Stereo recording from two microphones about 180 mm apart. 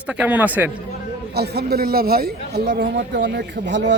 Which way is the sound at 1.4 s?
65° right (ahead or behind).